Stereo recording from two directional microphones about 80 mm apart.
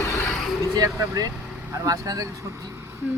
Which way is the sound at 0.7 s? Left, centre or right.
Right.